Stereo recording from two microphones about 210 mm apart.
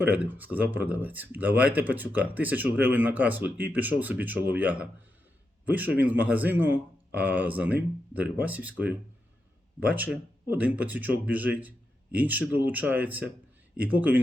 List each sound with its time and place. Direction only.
0.0 s a man's voice: 10° right (ahead or behind)